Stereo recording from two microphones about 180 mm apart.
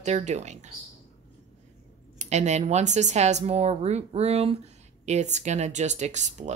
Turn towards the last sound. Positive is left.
turn(degrees=-40)  # may be behind; listen again after turning